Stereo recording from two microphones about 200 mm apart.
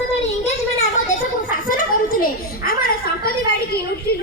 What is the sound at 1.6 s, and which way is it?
Children playing, 45° left (ahead or behind).